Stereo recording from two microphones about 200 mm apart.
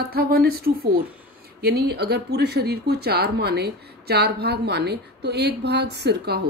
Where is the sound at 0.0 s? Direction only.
50° right (ahead or behind).